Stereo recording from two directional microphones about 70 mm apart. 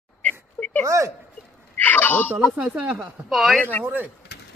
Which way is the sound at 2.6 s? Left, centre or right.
Right.